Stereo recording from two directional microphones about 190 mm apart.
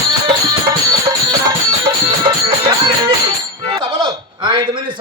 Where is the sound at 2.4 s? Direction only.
30° right (ahead or behind).